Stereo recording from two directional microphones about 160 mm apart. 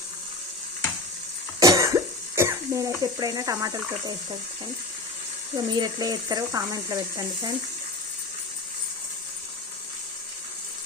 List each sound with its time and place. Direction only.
1.5 s cough: 20° right (ahead or behind)
5.5 s speech: 25° right (ahead or behind)